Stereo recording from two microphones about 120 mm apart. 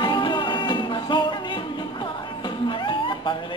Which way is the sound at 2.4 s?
40° left (ahead or behind).